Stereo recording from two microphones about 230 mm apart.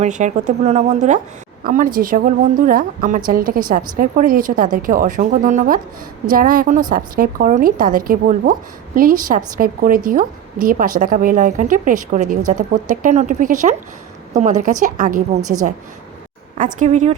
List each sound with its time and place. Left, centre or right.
0.0 s a woman's voice: right
15.4 s a woman's voice: centre
16.7 s a woman's voice: right